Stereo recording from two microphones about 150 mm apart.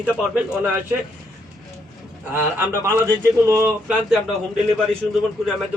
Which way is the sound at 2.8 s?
15° right (ahead or behind).